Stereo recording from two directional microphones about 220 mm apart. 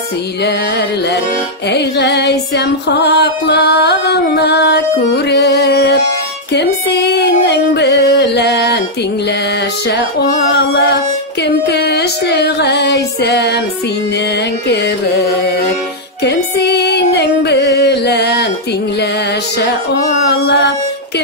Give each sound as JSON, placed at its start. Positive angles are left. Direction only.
{"t": 1.7, "sound": "music", "side_deg": 50}
{"t": 11.4, "sound": "music", "side_deg": 50}
{"t": 16.3, "sound": "music", "side_deg": 50}
{"t": 20.2, "sound": "music", "side_deg": 50}